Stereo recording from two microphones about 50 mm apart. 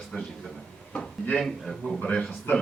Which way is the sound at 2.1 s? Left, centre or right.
Left.